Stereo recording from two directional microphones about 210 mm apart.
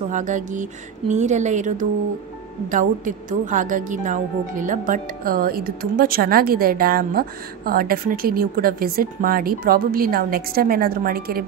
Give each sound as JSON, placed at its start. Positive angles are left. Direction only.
{"t": 0.1, "sound": "a woman's voice", "side_deg": -35}